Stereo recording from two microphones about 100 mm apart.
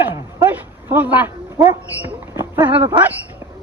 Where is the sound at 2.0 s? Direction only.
20° right (ahead or behind).